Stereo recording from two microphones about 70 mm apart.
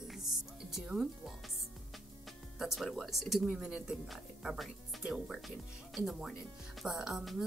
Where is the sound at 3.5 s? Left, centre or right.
Centre.